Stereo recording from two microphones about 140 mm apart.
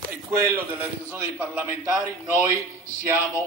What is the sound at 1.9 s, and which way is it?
Speech, 20° right (ahead or behind).